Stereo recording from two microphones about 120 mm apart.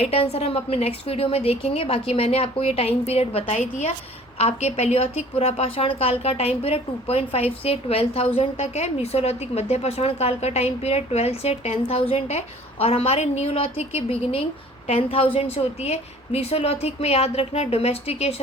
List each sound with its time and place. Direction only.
0.0 s a woman's voice: 55° left (ahead or behind)